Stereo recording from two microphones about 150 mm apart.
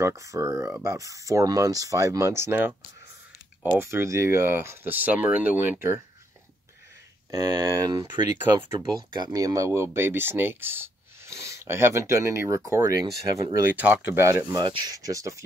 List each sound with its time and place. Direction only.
0.0 s speech: 20° right (ahead or behind)
3.7 s speech: 15° right (ahead or behind)
7.2 s speech: 25° right (ahead or behind)
8.7 s speech: 30° right (ahead or behind)
13.7 s speech: 10° right (ahead or behind)